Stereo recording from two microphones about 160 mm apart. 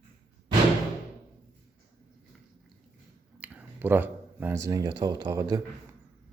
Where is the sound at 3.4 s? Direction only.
10° right (ahead or behind).